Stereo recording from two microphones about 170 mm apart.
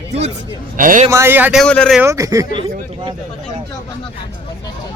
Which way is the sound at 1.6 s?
5° left (ahead or behind).